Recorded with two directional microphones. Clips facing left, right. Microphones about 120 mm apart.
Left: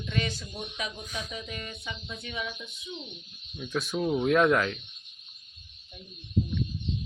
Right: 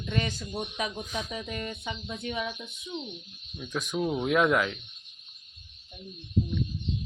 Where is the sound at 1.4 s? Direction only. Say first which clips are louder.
Right 4 dB; 40° right (ahead or behind).